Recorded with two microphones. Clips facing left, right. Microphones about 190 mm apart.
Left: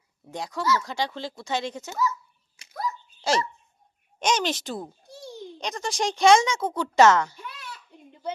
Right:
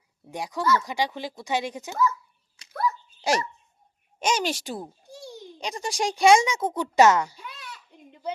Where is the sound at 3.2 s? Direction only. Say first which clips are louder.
Left 1 dB; 15° right (ahead or behind).